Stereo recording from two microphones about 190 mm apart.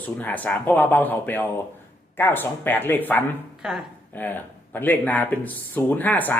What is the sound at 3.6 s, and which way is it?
Speech, 5° right (ahead or behind).